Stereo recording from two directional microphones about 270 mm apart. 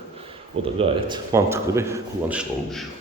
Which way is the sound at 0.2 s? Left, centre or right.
Right.